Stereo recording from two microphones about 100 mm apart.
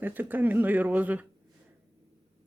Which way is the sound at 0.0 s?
20° right (ahead or behind).